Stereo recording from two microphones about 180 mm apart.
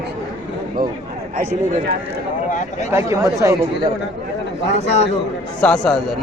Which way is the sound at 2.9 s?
15° right (ahead or behind).